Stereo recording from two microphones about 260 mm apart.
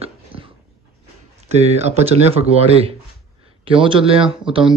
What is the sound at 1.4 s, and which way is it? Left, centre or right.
Speech, right.